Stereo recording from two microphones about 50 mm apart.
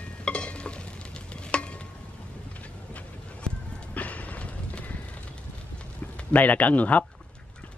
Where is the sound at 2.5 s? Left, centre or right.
Left.